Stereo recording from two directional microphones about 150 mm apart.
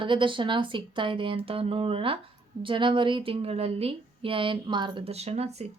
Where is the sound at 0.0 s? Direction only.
35° right (ahead or behind).